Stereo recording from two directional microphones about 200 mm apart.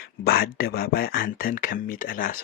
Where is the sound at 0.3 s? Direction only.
50° left (ahead or behind).